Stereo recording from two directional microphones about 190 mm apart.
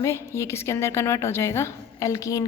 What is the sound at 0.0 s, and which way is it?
A woman's voice, 15° left (ahead or behind).